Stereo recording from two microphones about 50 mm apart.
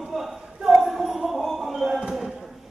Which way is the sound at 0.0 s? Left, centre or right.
Centre.